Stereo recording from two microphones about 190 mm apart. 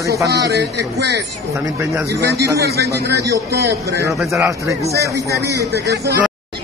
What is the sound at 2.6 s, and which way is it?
Speech, 60° right (ahead or behind).